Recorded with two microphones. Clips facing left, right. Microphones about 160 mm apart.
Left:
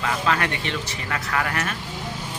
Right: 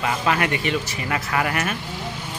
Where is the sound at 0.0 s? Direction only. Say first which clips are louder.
Right 1 dB; 10° right (ahead or behind).